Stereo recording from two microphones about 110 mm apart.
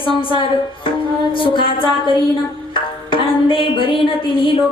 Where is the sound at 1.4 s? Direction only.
50° left (ahead or behind).